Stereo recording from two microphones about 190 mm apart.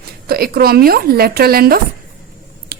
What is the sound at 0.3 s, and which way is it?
Speech, 55° right (ahead or behind).